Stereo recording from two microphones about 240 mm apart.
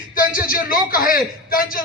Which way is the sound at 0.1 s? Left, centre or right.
Left.